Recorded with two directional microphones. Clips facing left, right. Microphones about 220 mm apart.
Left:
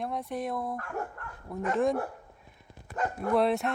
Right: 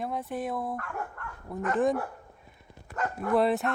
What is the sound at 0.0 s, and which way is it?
Speech, centre (ahead or behind).